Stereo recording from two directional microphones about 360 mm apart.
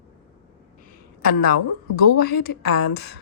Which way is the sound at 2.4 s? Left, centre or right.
Left.